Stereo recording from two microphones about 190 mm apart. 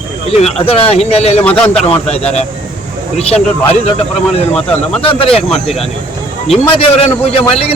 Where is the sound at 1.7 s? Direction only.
30° left (ahead or behind).